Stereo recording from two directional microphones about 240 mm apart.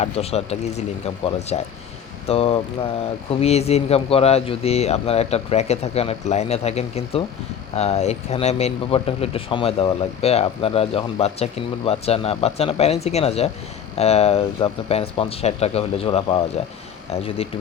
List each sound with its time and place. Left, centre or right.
0.0 s speech: left